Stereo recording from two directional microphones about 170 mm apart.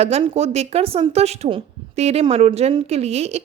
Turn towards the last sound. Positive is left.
turn(degrees=-40)  # may be behind; listen again after turning